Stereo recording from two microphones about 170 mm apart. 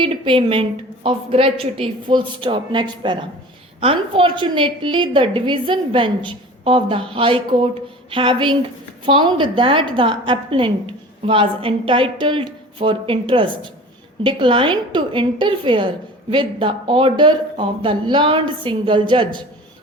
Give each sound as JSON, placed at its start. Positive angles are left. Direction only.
{"t": 0.0, "sound": "a woman's voice", "side_deg": -30}